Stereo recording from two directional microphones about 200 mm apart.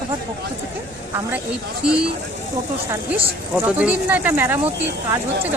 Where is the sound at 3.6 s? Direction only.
5° right (ahead or behind).